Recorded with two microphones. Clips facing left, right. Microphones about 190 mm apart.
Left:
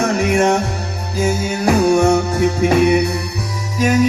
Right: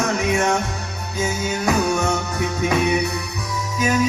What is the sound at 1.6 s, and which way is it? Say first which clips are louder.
Music: left 8 dB; 30° left (ahead or behind).